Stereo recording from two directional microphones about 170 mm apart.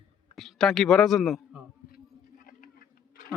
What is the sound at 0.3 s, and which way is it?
A man's voice, centre (ahead or behind).